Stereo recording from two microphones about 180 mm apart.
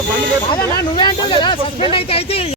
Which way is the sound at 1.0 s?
25° left (ahead or behind).